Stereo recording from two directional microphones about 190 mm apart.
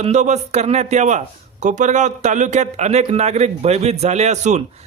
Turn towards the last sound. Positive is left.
turn(degrees=-35)  # may be behind; listen again after turning